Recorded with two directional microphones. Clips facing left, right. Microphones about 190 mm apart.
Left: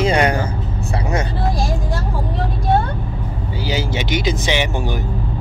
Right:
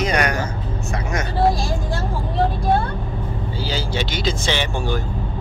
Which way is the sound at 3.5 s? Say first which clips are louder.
Left 3 dB; 15° left (ahead or behind).